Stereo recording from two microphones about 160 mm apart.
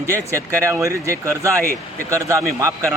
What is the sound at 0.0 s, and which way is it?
A man's voice, 20° right (ahead or behind).